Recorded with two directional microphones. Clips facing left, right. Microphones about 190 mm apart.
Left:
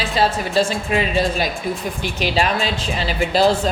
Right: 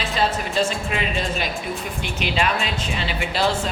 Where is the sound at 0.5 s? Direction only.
35° left (ahead or behind).